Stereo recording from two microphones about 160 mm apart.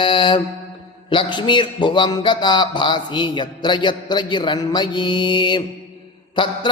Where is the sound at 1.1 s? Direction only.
30° left (ahead or behind).